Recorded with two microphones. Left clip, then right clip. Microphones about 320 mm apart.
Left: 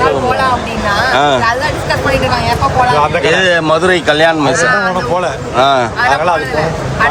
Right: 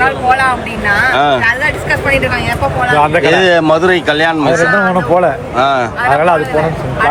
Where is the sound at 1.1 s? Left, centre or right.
Centre.